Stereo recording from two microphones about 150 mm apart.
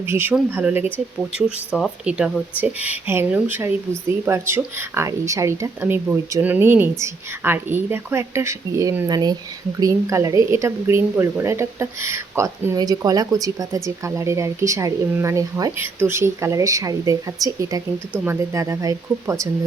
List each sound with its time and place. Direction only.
0.0 s speech: 15° right (ahead or behind)
1.2 s a woman's voice: centre (ahead or behind); by 19.5 s 20° right (ahead or behind)